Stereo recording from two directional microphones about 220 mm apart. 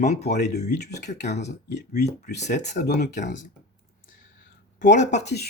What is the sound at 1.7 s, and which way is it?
Speech, 50° left (ahead or behind).